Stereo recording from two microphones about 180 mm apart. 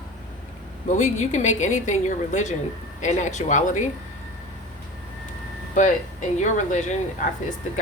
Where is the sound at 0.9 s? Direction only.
40° left (ahead or behind).